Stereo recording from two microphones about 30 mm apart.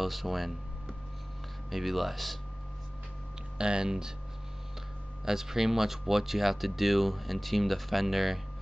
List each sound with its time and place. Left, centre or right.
0.0 s speech: centre
1.7 s speech: centre
3.5 s speech: right
5.2 s speech: centre